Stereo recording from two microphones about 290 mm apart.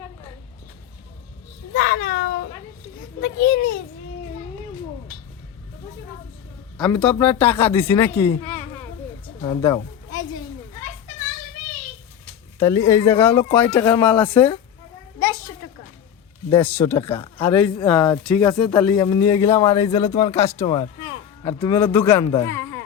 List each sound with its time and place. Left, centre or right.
1.7 s cat: left
3.2 s a child's voice: left
6.7 s speech: centre
9.2 s a sound: centre
12.5 s speech: centre
16.6 s a man's voice: centre